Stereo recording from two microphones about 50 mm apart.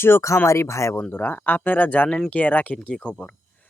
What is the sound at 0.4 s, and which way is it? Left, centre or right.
Speech, left.